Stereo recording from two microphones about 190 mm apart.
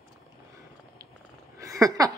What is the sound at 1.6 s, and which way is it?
Speech, 15° right (ahead or behind).